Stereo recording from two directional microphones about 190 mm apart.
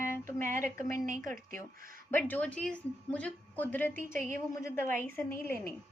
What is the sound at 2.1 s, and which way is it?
A woman's voice, 10° left (ahead or behind).